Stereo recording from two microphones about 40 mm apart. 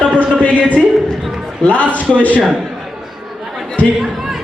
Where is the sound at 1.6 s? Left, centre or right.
Left.